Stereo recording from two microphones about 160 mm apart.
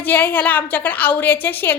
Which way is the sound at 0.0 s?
15° left (ahead or behind).